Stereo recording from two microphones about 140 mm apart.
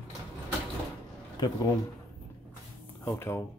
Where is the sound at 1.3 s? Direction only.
30° left (ahead or behind).